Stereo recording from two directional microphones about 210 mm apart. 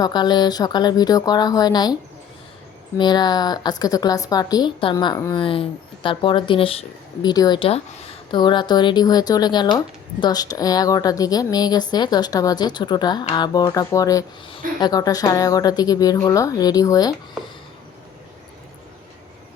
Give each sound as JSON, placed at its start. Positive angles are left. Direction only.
{"t": 0.0, "sound": "speech", "side_deg": 20}
{"t": 3.0, "sound": "a woman's voice", "side_deg": 20}